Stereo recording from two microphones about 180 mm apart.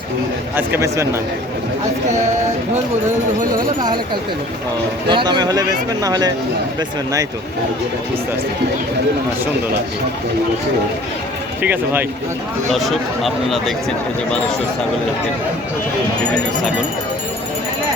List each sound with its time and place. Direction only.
0.5 s a man's voice: 15° right (ahead or behind)
3.8 s speech: 25° right (ahead or behind)
11.6 s a man's voice: 10° right (ahead or behind)
12.7 s speech: centre (ahead or behind)